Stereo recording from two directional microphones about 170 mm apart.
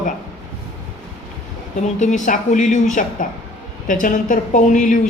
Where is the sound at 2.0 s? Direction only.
45° left (ahead or behind).